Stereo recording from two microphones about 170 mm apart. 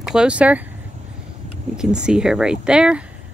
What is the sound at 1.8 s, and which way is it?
Speech, 5° right (ahead or behind).